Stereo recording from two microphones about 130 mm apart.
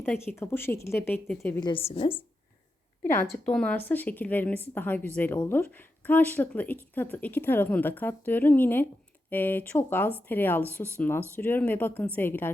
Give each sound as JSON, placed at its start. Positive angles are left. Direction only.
{"t": 0.1, "sound": "a woman's voice", "side_deg": 15}
{"t": 1.6, "sound": "a woman's voice", "side_deg": 40}
{"t": 3.0, "sound": "a woman's voice", "side_deg": 15}